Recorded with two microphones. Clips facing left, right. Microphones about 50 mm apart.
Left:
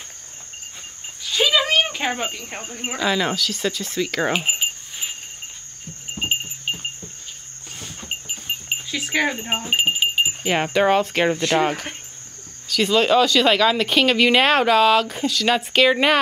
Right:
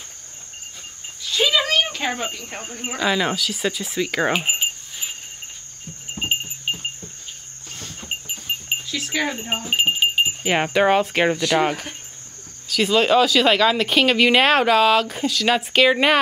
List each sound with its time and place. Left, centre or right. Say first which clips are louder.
1.3 s cricket: left 1 dB; centre
2.7 s speech: left 1 dB; centre
3.0 s speech: even; centre
6.1 s a sound: even; centre
7.7 s goat: right 1 dB; centre
8.8 s speech: left 4 dB; centre